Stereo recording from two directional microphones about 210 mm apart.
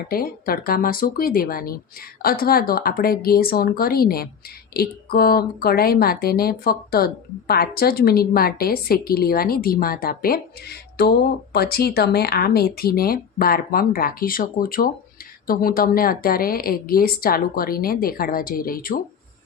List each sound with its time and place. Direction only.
0.1 s speech: 45° left (ahead or behind)